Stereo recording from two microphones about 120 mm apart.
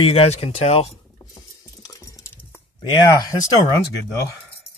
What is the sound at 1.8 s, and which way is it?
Typing, 30° left (ahead or behind).